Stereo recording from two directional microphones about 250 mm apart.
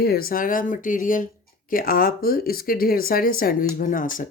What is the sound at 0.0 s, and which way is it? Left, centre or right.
Speech, left.